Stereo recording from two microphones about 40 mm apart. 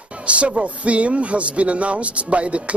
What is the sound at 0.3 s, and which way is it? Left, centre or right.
A man's voice, right.